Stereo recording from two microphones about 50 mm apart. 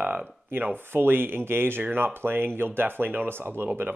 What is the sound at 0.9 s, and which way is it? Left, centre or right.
Speech, right.